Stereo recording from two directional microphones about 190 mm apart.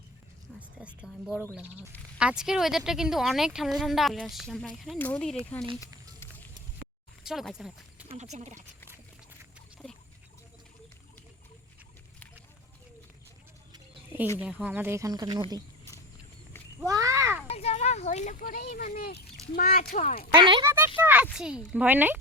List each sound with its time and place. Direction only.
0.8 s speech: 5° right (ahead or behind)
7.3 s speech: centre (ahead or behind)
8.1 s speech: 35° right (ahead or behind)
13.7 s a sound: 10° right (ahead or behind)
14.3 s speech: 10° right (ahead or behind)
16.8 s a sound: 20° right (ahead or behind)
17.5 s speech: 35° left (ahead or behind)
20.3 s speech: 25° right (ahead or behind)
20.7 s a sound: 15° right (ahead or behind)
21.3 s speech: 5° right (ahead or behind)